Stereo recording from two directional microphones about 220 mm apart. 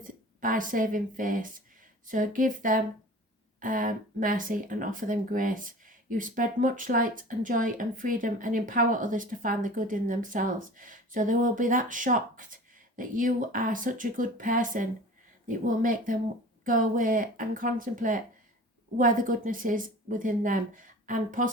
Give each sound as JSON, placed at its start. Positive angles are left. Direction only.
{"t": 0.0, "sound": "a woman's voice", "side_deg": -40}